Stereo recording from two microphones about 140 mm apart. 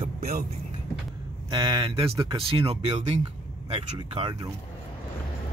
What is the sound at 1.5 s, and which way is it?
Speech, 35° right (ahead or behind).